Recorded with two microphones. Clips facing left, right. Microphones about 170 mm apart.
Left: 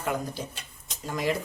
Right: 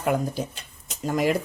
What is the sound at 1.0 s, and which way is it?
Speech, 50° right (ahead or behind).